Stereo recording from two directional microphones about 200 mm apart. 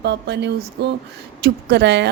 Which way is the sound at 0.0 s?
60° right (ahead or behind).